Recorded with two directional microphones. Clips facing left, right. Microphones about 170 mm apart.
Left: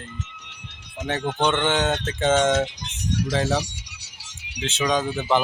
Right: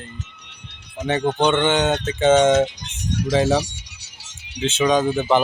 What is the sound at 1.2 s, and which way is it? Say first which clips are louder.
Speech: right 5 dB; 35° right (ahead or behind).